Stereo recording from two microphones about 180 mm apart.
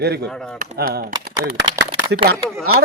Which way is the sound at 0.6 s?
50° right (ahead or behind).